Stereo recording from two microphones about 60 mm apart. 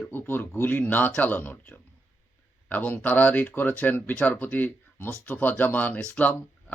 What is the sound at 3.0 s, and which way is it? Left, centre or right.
Speech, left.